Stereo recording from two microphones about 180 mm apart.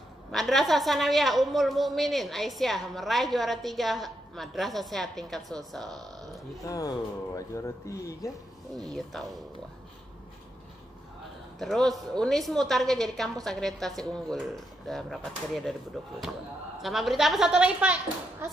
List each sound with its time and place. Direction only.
0.3 s a woman's voice: centre (ahead or behind)
6.6 s speech: 20° left (ahead or behind)
8.9 s a woman's voice: centre (ahead or behind)
11.6 s a woman's voice: centre (ahead or behind)
16.8 s a woman's voice: centre (ahead or behind)